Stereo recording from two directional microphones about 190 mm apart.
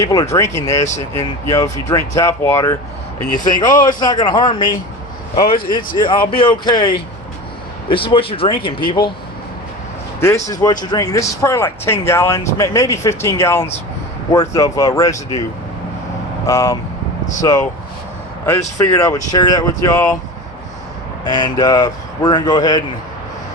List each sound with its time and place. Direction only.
0.0 s speech: 20° left (ahead or behind)
3.2 s speech: 45° left (ahead or behind)
3.6 s speech: 20° left (ahead or behind)
5.7 s speech: 25° left (ahead or behind)
10.2 s speech: 15° left (ahead or behind)
16.5 s speech: 15° left (ahead or behind)
18.8 s speech: 20° left (ahead or behind)
21.2 s speech: 20° left (ahead or behind)